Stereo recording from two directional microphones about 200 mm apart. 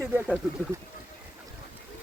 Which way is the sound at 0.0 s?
10° right (ahead or behind).